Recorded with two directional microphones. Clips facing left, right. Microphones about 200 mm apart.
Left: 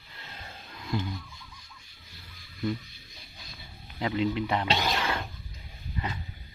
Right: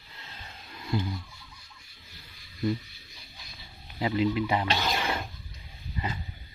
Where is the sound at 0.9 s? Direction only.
5° right (ahead or behind).